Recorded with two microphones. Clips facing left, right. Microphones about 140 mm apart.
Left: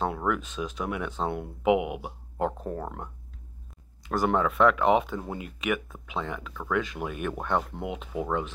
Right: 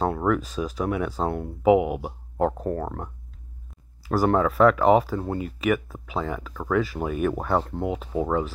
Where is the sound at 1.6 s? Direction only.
40° right (ahead or behind).